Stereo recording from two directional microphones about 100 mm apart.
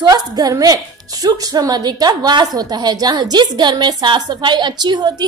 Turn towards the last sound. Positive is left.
turn(degrees=-45)  # may be behind; listen again after turning